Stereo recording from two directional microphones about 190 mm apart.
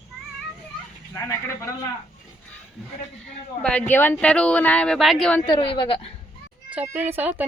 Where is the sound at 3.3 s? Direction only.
5° left (ahead or behind).